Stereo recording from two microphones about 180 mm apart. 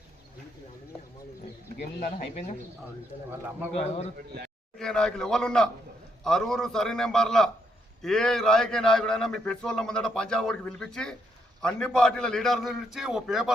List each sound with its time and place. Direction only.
2.0 s speech: 50° left (ahead or behind)
4.8 s a man's voice: 5° left (ahead or behind)